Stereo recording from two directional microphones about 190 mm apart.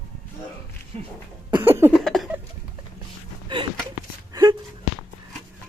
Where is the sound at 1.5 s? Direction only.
10° right (ahead or behind).